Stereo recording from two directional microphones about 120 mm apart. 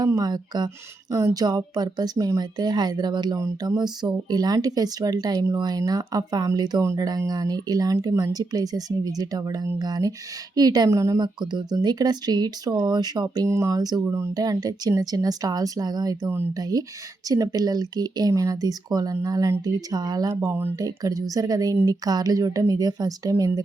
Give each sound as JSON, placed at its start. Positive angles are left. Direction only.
{"t": 0.0, "sound": "speech", "side_deg": -35}
{"t": 20.7, "sound": "speech", "side_deg": -30}